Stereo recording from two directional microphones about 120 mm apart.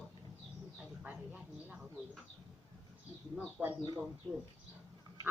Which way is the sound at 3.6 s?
5° left (ahead or behind).